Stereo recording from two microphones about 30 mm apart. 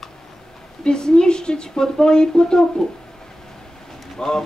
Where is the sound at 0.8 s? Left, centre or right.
Left.